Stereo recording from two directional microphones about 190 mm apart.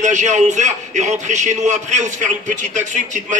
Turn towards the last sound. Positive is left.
turn(degrees=-40)  # may be behind; listen again after turning